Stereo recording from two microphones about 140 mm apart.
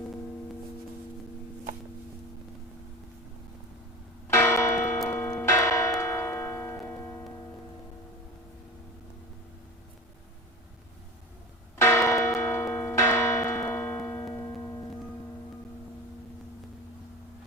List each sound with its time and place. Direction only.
4.3 s church bell: 20° left (ahead or behind)
11.8 s church bell: 20° left (ahead or behind)